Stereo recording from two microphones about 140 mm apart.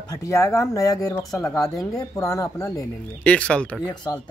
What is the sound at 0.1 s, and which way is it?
Speech, 20° left (ahead or behind).